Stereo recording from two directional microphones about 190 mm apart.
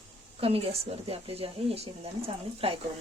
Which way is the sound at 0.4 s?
30° right (ahead or behind).